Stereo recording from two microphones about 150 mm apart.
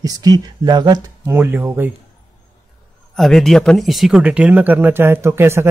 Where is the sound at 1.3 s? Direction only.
15° right (ahead or behind).